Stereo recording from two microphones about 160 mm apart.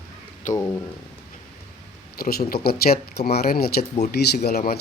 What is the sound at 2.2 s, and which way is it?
Speech, 75° left (ahead or behind).